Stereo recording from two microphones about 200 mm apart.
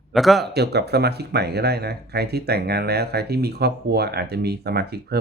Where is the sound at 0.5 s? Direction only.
55° right (ahead or behind).